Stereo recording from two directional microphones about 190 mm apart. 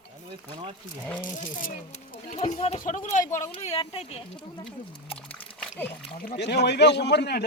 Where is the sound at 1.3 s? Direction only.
45° left (ahead or behind).